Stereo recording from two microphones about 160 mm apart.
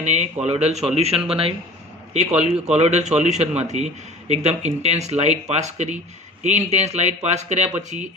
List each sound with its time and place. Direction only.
0.0 s a man's voice: 45° right (ahead or behind)